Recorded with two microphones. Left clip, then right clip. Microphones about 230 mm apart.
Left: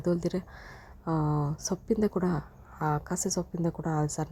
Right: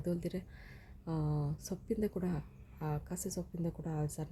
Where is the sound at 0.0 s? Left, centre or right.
Centre.